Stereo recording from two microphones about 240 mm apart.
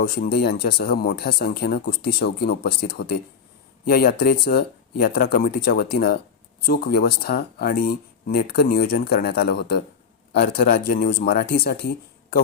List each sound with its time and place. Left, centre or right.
0.0 s speech: left